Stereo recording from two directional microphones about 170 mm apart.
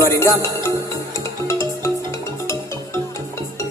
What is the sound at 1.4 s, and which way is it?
Music, 15° left (ahead or behind).